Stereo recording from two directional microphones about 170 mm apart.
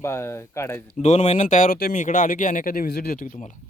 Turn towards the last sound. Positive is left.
turn(degrees=45)  # may be behind; listen again after turning